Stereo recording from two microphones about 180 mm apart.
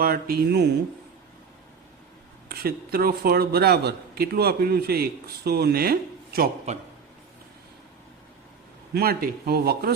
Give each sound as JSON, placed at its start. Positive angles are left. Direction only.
{"t": 0.0, "sound": "speech", "side_deg": -55}
{"t": 2.5, "sound": "speech", "side_deg": -55}
{"t": 8.9, "sound": "speech", "side_deg": -60}